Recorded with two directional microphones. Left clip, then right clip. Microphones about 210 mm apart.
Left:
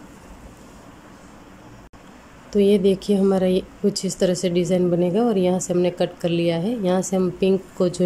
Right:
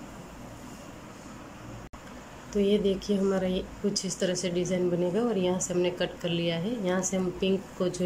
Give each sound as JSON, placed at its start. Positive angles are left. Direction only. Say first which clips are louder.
{"t": 2.5, "sound": "speech", "louder": "left 8 dB", "side_deg": 20}